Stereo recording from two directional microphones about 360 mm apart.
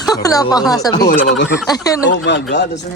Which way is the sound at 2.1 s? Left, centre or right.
Left.